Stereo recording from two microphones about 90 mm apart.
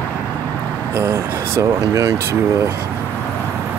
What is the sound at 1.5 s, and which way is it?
Speech, 40° right (ahead or behind).